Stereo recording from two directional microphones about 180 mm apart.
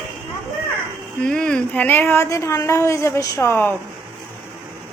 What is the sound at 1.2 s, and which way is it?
Speech, 5° left (ahead or behind).